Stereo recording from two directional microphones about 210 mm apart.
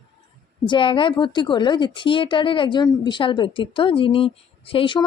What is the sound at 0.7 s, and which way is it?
A woman's voice, 25° left (ahead or behind).